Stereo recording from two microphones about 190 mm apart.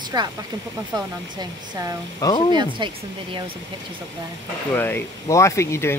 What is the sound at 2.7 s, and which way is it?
Speech, 25° right (ahead or behind).